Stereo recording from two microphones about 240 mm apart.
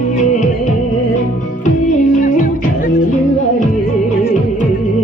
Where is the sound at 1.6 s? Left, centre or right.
Left.